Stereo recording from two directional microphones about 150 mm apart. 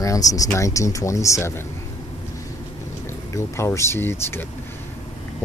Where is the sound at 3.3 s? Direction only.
20° left (ahead or behind).